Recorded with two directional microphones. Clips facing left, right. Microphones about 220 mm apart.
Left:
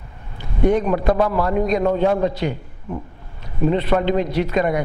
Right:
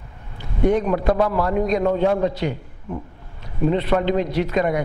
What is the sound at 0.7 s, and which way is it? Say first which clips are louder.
A man's voice: left 1 dB; 15° left (ahead or behind).